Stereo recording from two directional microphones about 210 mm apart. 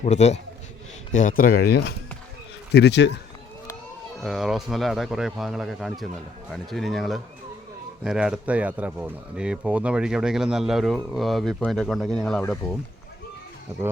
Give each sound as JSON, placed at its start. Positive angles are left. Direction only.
{"t": 0.0, "sound": "a man's voice", "side_deg": 30}
{"t": 4.2, "sound": "speech", "side_deg": 0}